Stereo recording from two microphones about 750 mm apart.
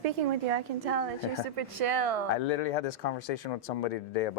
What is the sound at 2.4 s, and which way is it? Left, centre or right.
Speech, left.